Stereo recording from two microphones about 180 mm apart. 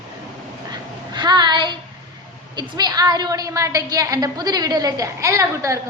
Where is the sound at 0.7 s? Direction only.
25° right (ahead or behind).